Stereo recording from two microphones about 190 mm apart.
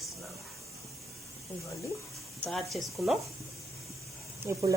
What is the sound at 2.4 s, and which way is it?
Speech, centre (ahead or behind).